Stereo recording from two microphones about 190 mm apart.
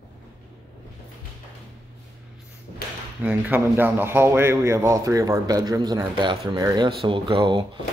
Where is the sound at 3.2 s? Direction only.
10° right (ahead or behind).